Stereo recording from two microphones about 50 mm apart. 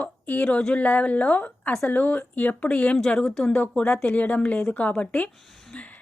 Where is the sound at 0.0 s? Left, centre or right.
Left.